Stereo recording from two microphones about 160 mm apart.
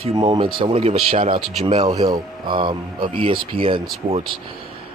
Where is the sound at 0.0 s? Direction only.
35° right (ahead or behind).